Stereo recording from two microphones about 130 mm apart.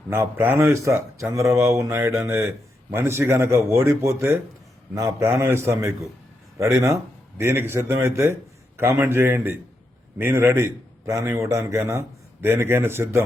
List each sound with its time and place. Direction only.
0.1 s a man's voice: 15° right (ahead or behind)